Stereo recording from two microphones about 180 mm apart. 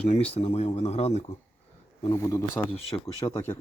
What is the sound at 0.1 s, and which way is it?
Speech, 35° left (ahead or behind).